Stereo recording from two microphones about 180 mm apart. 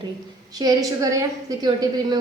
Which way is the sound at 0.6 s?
20° right (ahead or behind).